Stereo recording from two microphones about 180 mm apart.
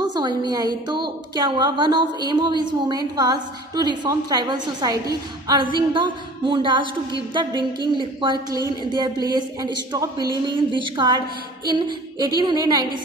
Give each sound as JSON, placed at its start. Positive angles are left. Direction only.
{"t": 0.0, "sound": "a woman's voice", "side_deg": -25}